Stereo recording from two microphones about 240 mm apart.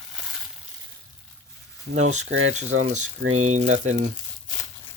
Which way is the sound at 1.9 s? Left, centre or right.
Right.